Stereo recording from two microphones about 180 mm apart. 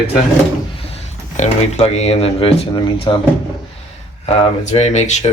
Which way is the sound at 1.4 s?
35° left (ahead or behind).